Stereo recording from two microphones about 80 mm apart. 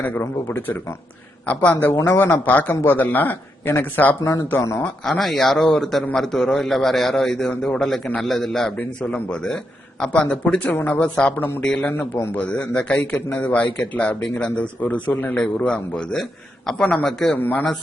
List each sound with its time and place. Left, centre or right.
0.0 s speech: left
5.0 s a man's voice: centre; by 11.6 s left
11.6 s a man's voice: centre
11.9 s a man's voice: left
12.4 s a man's voice: centre
17.3 s speech: left